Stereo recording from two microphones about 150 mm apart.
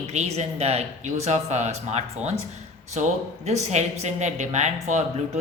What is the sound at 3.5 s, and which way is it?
A man's voice, 50° right (ahead or behind).